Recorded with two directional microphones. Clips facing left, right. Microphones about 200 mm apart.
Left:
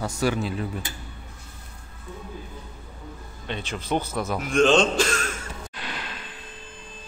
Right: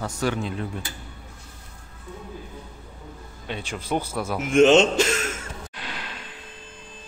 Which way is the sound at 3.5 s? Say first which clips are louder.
Even; 10° right (ahead or behind).